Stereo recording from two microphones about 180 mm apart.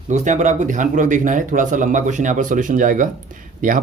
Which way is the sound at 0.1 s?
40° right (ahead or behind).